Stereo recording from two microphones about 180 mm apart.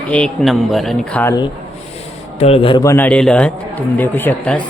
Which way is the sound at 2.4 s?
35° left (ahead or behind).